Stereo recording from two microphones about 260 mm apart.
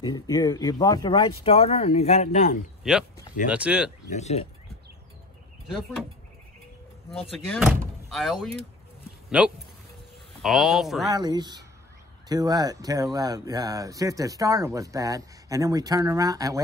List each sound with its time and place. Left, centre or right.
0.0 s speech: centre
2.8 s speech: centre
4.1 s speech: left
6.0 s speech: centre
11.1 s speech: centre